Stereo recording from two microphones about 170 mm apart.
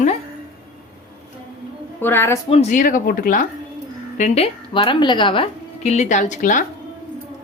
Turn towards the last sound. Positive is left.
turn(degrees=50)  # may be behind; listen again after turning